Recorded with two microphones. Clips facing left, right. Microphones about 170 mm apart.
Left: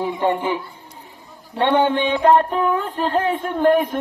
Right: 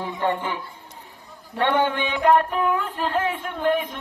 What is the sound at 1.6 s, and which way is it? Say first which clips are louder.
Mantra: left 4 dB; 25° left (ahead or behind).